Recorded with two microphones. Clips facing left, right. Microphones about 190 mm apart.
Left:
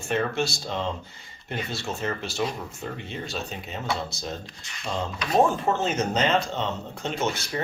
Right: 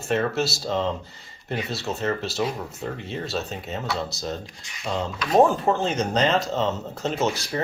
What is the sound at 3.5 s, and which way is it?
Speech, centre (ahead or behind).